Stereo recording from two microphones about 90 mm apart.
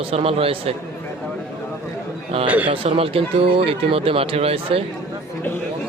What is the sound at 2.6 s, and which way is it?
A man's voice, 90° right.